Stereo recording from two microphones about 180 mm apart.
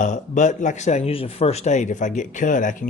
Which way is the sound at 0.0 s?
45° left (ahead or behind).